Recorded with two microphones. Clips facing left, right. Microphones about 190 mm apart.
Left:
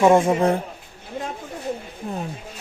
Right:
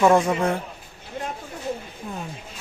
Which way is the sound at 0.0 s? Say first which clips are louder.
Left 2 dB; 25° left (ahead or behind).